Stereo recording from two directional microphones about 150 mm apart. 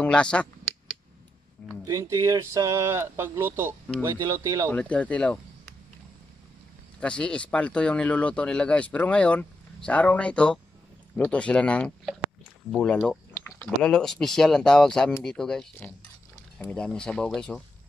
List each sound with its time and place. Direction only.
0.0 s speech: 5° left (ahead or behind)
1.9 s speech: 20° right (ahead or behind)
4.6 s speech: 10° left (ahead or behind)
7.0 s speech: 10° left (ahead or behind)
13.3 s a sound: 20° left (ahead or behind)
13.8 s speech: 5° left (ahead or behind)